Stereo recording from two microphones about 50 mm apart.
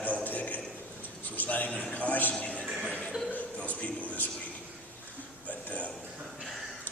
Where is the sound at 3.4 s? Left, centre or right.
Left.